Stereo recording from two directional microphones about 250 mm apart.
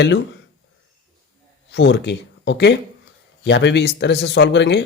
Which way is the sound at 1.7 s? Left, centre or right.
Left.